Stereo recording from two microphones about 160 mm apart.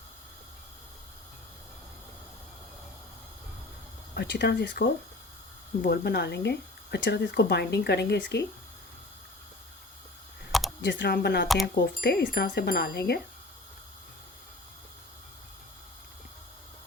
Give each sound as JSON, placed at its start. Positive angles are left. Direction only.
{"t": 4.1, "sound": "speech", "side_deg": 90}
{"t": 10.8, "sound": "speech", "side_deg": 90}
{"t": 11.4, "sound": "speech", "side_deg": 0}
{"t": 12.0, "sound": "speech", "side_deg": 85}